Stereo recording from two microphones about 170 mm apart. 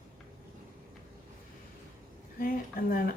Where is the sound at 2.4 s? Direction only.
55° left (ahead or behind).